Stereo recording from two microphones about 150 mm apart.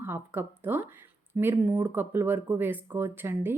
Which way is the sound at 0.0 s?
15° right (ahead or behind).